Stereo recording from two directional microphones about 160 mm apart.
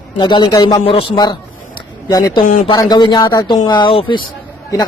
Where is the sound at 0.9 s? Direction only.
35° left (ahead or behind).